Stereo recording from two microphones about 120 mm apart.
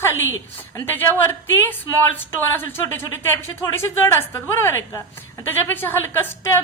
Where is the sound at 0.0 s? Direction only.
20° left (ahead or behind).